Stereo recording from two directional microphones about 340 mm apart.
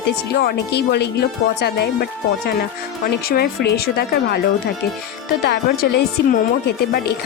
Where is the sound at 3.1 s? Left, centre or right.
Left.